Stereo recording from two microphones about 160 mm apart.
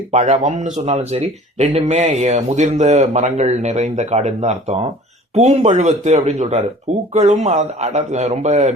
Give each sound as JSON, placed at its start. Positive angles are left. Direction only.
{"t": 0.1, "sound": "speech", "side_deg": -45}